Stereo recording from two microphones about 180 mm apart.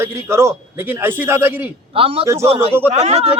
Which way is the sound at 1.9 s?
30° right (ahead or behind).